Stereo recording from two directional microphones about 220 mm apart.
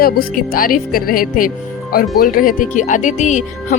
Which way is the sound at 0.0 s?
40° left (ahead or behind).